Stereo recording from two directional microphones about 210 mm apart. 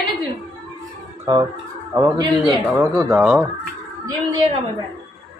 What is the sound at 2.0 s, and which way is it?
A man's voice, 20° right (ahead or behind).